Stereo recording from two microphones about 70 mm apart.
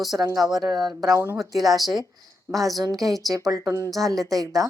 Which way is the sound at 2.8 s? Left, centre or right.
Right.